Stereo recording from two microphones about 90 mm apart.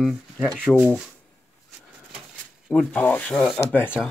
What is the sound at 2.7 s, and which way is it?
Speech, 15° left (ahead or behind).